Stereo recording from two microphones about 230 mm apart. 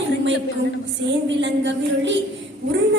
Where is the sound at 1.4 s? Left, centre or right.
Right.